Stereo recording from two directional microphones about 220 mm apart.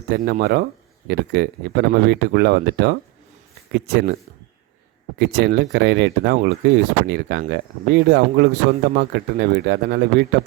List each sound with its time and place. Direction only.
0.1 s speech: 45° right (ahead or behind)
5.2 s speech: 45° right (ahead or behind)